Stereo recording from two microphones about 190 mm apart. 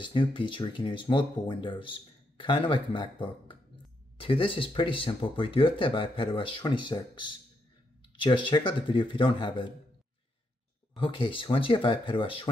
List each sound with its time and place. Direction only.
0.0 s speech: 25° left (ahead or behind)
11.0 s speech: 25° left (ahead or behind)